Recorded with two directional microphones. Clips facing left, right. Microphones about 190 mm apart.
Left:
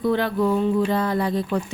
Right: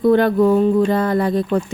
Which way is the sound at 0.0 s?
50° right (ahead or behind).